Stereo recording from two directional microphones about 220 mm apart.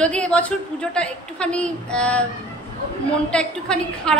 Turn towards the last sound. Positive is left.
turn(degrees=5)  # may be behind; listen again after turning